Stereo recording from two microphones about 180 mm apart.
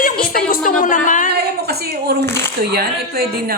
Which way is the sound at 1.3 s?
60° right (ahead or behind).